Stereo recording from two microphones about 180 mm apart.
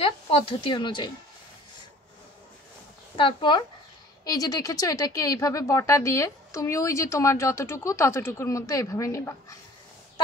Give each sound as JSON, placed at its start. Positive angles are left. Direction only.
{"t": 0.0, "sound": "speech", "side_deg": 30}
{"t": 3.2, "sound": "speech", "side_deg": 25}